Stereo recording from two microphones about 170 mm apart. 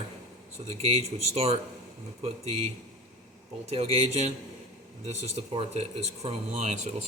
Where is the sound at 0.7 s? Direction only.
35° right (ahead or behind).